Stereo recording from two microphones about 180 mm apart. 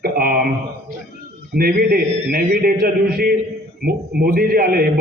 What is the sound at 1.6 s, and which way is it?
A man's voice, 60° right (ahead or behind).